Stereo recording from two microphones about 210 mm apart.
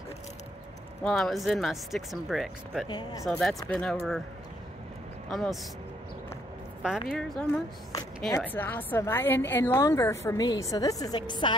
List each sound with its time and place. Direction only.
1.0 s speech: centre (ahead or behind)
2.9 s speech: 20° left (ahead or behind)
3.3 s speech: centre (ahead or behind)
5.3 s speech: centre (ahead or behind)
6.8 s a woman's voice: centre (ahead or behind); by 11.5 s 20° left (ahead or behind)